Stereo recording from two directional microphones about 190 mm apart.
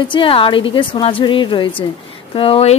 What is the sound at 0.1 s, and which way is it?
A woman's voice, 25° left (ahead or behind).